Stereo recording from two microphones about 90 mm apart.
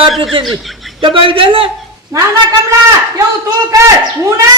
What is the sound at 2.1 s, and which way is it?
Speech, 40° right (ahead or behind).